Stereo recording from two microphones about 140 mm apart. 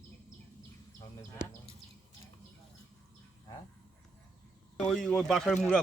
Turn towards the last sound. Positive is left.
turn(degrees=5)  # may be behind; listen again after turning